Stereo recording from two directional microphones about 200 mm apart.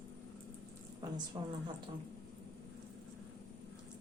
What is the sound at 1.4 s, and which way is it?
Speech, 20° right (ahead or behind).